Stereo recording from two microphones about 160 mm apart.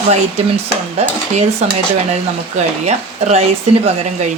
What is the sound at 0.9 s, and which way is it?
Stir, 40° right (ahead or behind).